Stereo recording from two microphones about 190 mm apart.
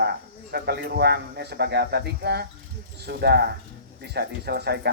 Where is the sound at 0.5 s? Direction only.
60° right (ahead or behind).